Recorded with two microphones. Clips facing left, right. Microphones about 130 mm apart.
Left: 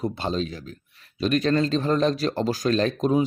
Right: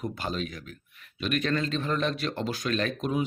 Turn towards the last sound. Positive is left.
turn(degrees=35)  # may be behind; listen again after turning